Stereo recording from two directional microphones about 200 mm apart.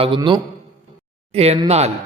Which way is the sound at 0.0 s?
25° right (ahead or behind).